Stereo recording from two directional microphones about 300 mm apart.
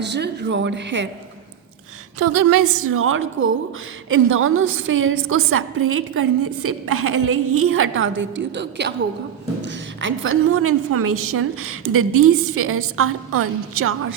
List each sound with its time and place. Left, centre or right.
0.0 s speech: right
2.1 s a woman's voice: right